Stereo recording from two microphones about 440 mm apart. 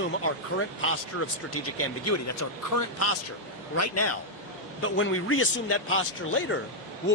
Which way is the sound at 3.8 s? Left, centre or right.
Left.